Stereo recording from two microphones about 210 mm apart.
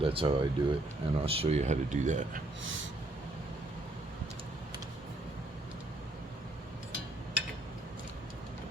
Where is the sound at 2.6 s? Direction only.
65° right (ahead or behind).